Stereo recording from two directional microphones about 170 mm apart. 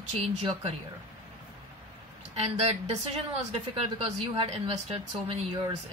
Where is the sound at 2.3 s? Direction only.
40° right (ahead or behind).